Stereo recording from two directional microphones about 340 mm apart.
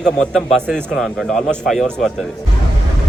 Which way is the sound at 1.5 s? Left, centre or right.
Centre.